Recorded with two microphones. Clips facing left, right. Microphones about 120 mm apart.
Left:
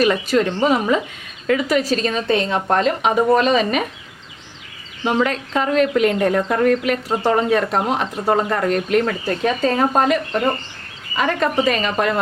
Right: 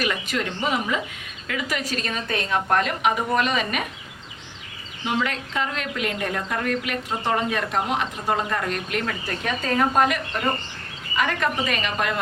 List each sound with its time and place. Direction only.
0.0 s a woman's voice: 35° left (ahead or behind)
5.0 s speech: 40° left (ahead or behind)